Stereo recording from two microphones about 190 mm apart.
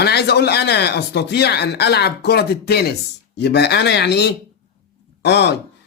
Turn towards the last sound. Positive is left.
turn(degrees=60)  # may be behind; listen again after turning